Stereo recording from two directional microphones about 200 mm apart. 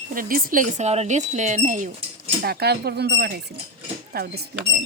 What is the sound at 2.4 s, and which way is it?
Speech, 50° right (ahead or behind).